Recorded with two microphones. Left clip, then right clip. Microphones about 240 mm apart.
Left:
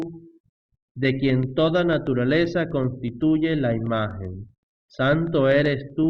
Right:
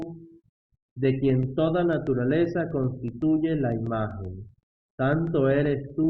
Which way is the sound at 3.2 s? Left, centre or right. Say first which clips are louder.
Left 3 dB; left.